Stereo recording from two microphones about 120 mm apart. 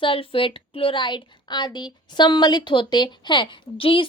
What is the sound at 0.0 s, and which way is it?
A woman's voice, 50° left (ahead or behind).